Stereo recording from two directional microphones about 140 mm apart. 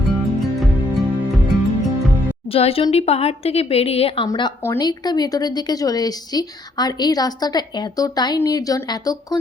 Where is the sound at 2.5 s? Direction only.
45° left (ahead or behind).